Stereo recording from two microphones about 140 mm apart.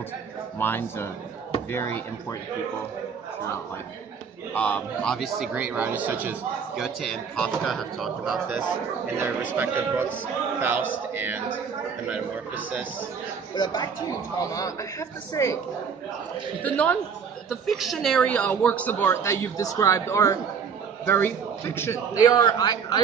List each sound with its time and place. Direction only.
0.6 s a woman's voice: 15° left (ahead or behind)
4.6 s a man's voice: 10° left (ahead or behind); by 6.3 s 10° right (ahead or behind)
6.8 s a man's voice: 5° left (ahead or behind); by 11.4 s 15° right (ahead or behind)
13.6 s a man's voice: 30° left (ahead or behind)
16.6 s a woman's voice: 10° left (ahead or behind)
17.5 s a woman's voice: centre (ahead or behind); by 22.9 s 30° left (ahead or behind)